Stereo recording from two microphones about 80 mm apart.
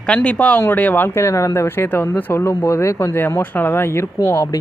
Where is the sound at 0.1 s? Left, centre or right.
Centre.